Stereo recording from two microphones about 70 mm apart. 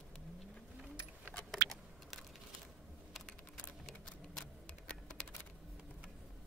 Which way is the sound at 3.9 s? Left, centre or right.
Centre.